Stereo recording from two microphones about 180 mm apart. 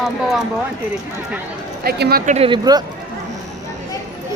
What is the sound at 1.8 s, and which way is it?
Speech, 60° right (ahead or behind).